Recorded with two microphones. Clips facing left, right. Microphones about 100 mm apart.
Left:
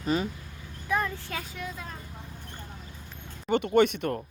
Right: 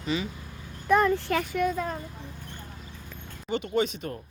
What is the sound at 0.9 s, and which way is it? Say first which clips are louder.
Speech: right 8 dB; 65° right (ahead or behind).